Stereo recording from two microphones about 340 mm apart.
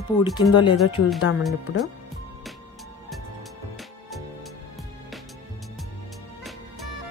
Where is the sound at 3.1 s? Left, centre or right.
Centre.